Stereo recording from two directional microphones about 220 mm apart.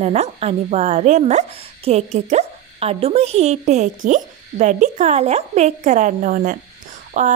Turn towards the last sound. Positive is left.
turn(degrees=-35)  # may be behind; listen again after turning